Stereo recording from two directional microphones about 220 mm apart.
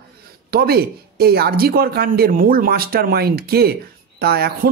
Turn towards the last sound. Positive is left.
turn(degrees=-45)  # may be behind; listen again after turning